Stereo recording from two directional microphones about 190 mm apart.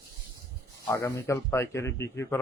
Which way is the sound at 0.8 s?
15° left (ahead or behind).